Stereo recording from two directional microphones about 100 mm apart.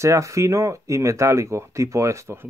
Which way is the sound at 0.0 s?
30° right (ahead or behind).